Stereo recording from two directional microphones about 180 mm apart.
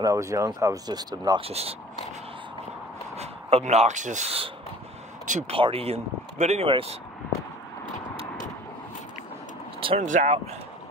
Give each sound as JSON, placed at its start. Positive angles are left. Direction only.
{"t": 0.0, "sound": "speech", "side_deg": -20}
{"t": 1.5, "sound": "speech", "side_deg": -35}
{"t": 3.2, "sound": "speech", "side_deg": -35}
{"t": 5.5, "sound": "speech", "side_deg": -30}
{"t": 9.8, "sound": "vehicle", "side_deg": -30}
{"t": 10.0, "sound": "speech", "side_deg": -40}